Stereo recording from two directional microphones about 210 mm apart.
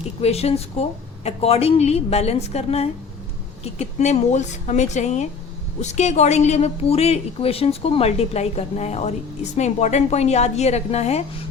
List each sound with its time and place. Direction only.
0.2 s a woman's voice: 30° left (ahead or behind)